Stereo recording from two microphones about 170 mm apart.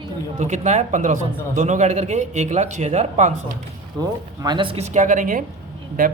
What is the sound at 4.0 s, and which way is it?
Speech, 25° right (ahead or behind).